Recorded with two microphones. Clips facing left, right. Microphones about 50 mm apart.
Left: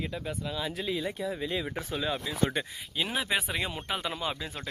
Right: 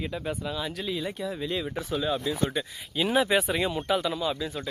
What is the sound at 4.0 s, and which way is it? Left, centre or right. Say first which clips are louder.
Speech: right 5 dB; left.